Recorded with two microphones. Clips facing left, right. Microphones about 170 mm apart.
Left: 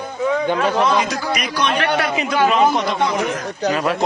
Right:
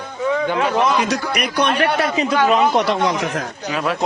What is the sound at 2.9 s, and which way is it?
Speech, 70° right (ahead or behind).